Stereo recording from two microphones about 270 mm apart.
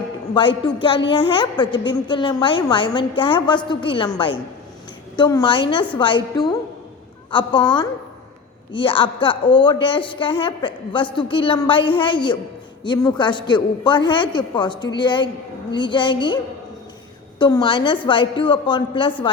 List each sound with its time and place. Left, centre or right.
0.3 s a woman's voice: centre
5.1 s a woman's voice: centre
17.4 s a woman's voice: centre